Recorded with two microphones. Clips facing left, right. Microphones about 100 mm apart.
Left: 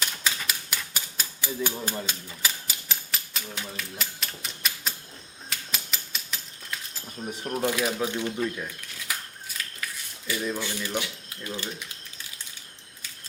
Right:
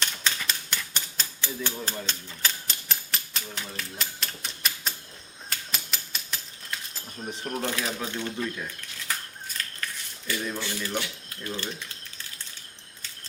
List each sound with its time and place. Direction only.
0.0 s typewriter: 5° left (ahead or behind)
7.3 s speech: 10° left (ahead or behind)
9.8 s a sound: 10° left (ahead or behind)
10.5 s speech: 15° left (ahead or behind)